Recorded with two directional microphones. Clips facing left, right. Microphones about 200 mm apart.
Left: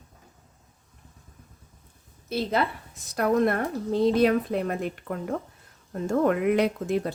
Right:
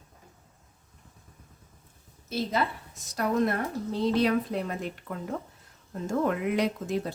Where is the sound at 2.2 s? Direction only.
60° left (ahead or behind).